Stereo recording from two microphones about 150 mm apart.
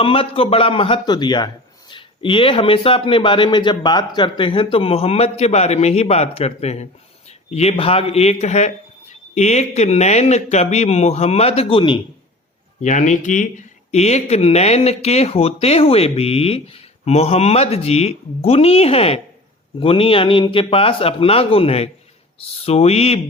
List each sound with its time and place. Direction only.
0.0 s a man's voice: 40° left (ahead or behind)
12.8 s a man's voice: 55° left (ahead or behind)